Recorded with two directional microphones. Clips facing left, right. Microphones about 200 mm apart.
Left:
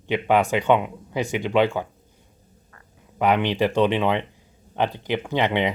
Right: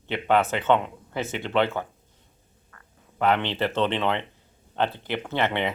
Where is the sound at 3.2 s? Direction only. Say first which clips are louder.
Left 3 dB; 15° left (ahead or behind).